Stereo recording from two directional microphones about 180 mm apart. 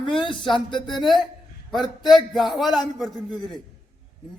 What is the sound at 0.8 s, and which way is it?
A man's voice, centre (ahead or behind).